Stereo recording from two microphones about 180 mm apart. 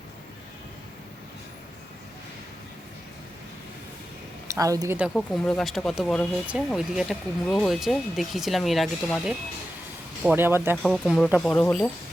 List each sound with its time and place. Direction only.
4.4 s speech: 20° right (ahead or behind)
5.1 s speech: 5° left (ahead or behind)
10.2 s speech: 10° right (ahead or behind)
10.8 s speech: centre (ahead or behind)